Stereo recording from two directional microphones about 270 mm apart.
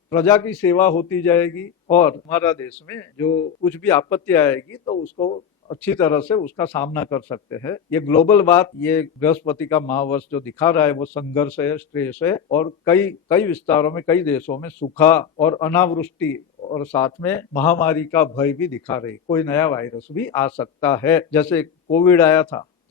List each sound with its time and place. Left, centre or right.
0.1 s a man's voice: centre
5.1 s speech: centre
5.8 s a man's voice: centre